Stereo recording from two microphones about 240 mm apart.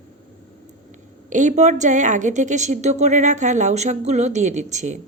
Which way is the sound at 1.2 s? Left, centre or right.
Right.